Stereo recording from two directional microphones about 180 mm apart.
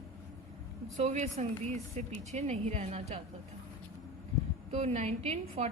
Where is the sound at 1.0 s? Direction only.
40° right (ahead or behind).